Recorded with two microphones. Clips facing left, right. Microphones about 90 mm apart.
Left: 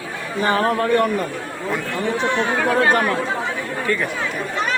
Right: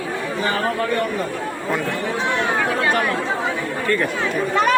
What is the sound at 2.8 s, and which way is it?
Speech, 40° left (ahead or behind).